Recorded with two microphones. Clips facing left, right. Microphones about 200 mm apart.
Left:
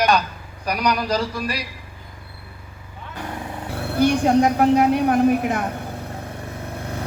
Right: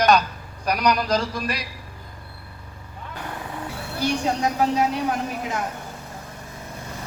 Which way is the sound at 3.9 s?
55° left (ahead or behind).